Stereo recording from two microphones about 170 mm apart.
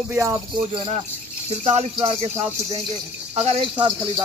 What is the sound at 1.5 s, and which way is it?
Speech, 40° right (ahead or behind).